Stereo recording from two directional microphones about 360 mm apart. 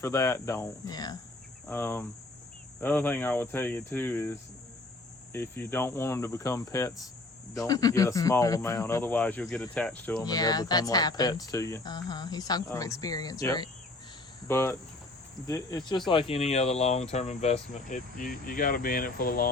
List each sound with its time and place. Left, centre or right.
0.0 s speech: centre; by 19.5 s left